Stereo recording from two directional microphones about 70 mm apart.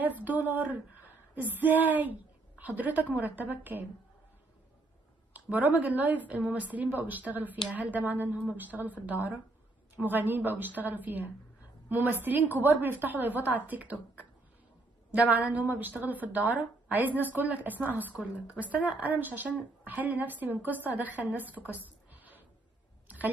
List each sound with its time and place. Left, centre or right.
0.0 s female singing: right
5.3 s a woman's voice: right
15.1 s a woman's voice: right
23.1 s a sound: right